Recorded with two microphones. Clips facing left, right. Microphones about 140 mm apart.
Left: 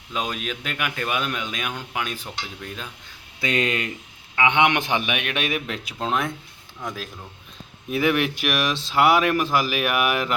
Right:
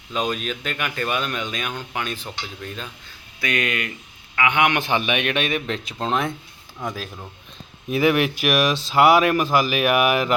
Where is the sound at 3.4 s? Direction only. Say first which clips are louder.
Left 1 dB; 25° left (ahead or behind); by 6.3 s 5° left (ahead or behind).